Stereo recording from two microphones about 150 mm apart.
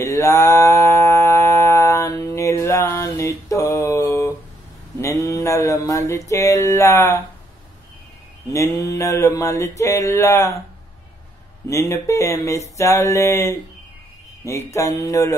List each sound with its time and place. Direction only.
0.0 s mantra: 20° left (ahead or behind)
8.5 s mantra: 20° left (ahead or behind)
11.7 s mantra: 20° left (ahead or behind)